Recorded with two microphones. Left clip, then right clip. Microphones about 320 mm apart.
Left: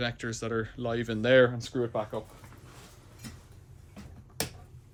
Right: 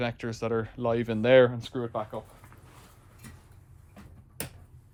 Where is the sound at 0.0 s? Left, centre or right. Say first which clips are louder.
Right 2 dB; centre.